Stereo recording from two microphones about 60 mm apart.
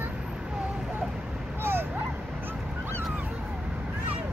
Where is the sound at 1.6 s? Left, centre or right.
Right.